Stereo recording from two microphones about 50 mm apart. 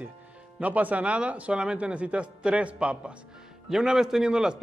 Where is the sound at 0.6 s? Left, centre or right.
Right.